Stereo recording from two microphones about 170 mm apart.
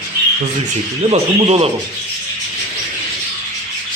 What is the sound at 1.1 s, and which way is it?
Speech, 35° right (ahead or behind).